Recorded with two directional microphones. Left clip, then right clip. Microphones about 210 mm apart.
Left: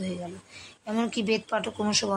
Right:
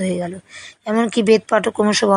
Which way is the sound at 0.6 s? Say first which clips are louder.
Right 11 dB; 30° right (ahead or behind).